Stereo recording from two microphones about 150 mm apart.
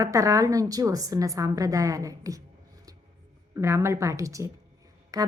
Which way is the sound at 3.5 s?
20° right (ahead or behind).